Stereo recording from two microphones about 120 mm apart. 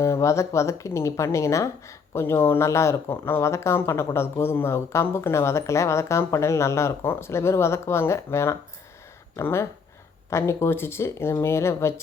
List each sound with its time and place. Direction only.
0.0 s a woman's voice: 25° left (ahead or behind)